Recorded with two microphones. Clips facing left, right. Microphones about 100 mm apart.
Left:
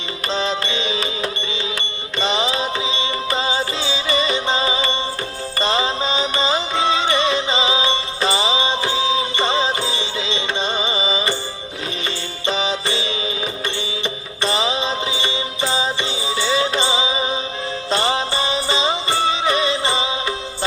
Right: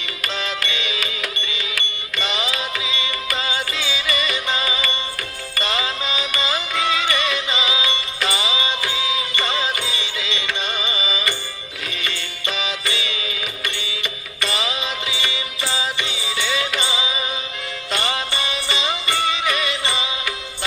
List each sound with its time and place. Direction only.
0.3 s music: 30° left (ahead or behind)
14.4 s music: 30° left (ahead or behind)